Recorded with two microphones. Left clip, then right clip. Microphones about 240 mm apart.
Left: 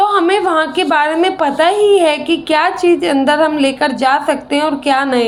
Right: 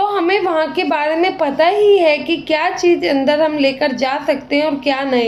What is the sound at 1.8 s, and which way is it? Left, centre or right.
A woman's voice, left.